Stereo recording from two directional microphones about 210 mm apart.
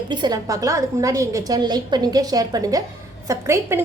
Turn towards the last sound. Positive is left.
turn(degrees=-15)  # may be behind; listen again after turning